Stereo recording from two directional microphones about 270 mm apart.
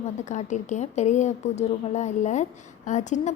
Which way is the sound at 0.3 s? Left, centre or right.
Left.